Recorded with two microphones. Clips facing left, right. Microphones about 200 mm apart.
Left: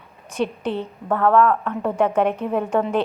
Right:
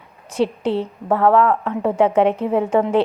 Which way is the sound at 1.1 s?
25° right (ahead or behind).